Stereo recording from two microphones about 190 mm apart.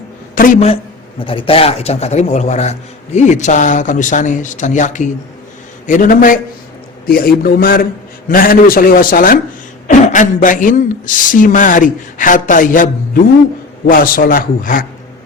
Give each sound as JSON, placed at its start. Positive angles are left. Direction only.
{"t": 0.3, "sound": "speech", "side_deg": 45}